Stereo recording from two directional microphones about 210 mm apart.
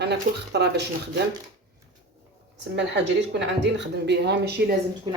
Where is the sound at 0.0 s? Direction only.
50° right (ahead or behind).